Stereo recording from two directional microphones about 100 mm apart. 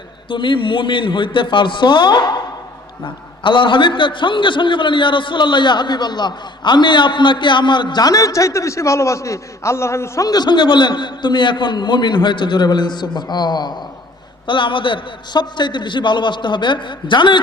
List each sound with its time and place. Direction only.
0.3 s a man's voice: 55° left (ahead or behind); by 10.2 s 25° left (ahead or behind)
10.2 s a man's voice: 45° left (ahead or behind)
14.4 s a man's voice: 55° left (ahead or behind)